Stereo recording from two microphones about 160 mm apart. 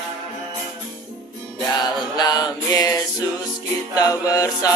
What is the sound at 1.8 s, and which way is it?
Music, 25° left (ahead or behind).